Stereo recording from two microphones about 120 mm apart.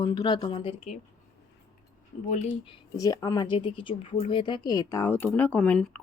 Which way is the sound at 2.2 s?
90° left.